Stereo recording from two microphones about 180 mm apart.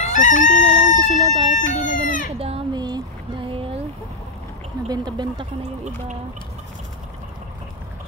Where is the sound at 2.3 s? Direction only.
30° right (ahead or behind).